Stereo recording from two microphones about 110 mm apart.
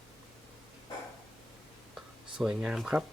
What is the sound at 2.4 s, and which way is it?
Speech, 5° right (ahead or behind).